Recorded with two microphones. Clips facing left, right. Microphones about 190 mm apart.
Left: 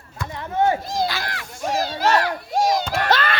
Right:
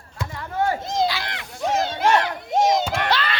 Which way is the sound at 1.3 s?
20° right (ahead or behind).